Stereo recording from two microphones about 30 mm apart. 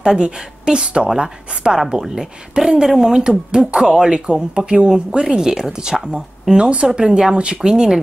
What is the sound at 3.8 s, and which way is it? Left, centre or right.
Speech, right.